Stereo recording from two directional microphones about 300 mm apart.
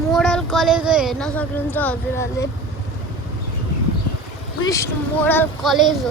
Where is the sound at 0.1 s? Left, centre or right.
Centre.